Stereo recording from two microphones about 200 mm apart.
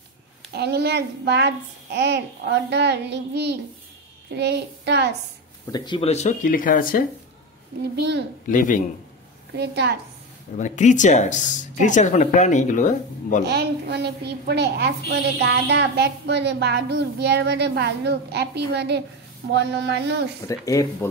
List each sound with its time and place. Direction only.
0.5 s a woman's voice: 55° right (ahead or behind)
5.7 s speech: 25° left (ahead or behind); by 7.0 s 45° left (ahead or behind)
7.9 s a woman's voice: 60° right (ahead or behind)
8.5 s speech: 40° left (ahead or behind)
9.6 s a woman's voice: 55° right (ahead or behind)
10.6 s speech: 40° left (ahead or behind)
13.5 s a woman's voice: 55° right (ahead or behind)
20.4 s speech: 15° left (ahead or behind)